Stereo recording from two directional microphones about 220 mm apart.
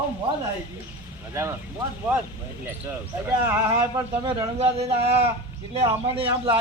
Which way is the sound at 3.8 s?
15° right (ahead or behind).